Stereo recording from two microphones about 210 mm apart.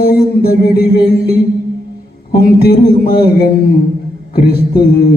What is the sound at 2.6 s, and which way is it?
Music, 45° left (ahead or behind).